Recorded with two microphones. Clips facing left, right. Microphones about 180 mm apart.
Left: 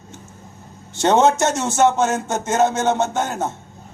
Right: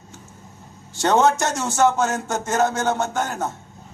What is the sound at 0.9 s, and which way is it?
A man's voice, 20° left (ahead or behind).